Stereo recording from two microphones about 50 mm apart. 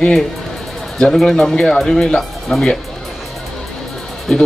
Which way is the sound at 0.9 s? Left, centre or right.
Centre.